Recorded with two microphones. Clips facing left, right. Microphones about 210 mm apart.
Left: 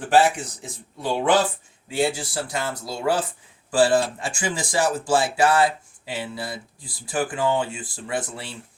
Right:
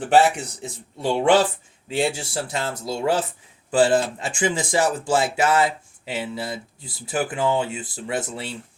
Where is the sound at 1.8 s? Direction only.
25° right (ahead or behind).